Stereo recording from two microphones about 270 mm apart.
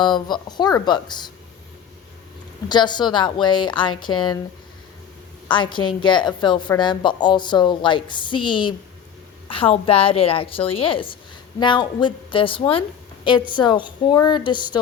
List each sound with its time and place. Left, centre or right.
0.0 s a woman's voice: centre
2.6 s a woman's voice: centre
5.7 s a woman's voice: centre